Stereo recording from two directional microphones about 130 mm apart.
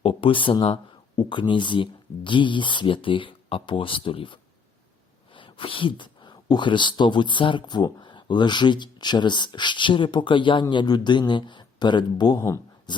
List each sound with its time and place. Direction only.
0.0 s speech: 45° left (ahead or behind)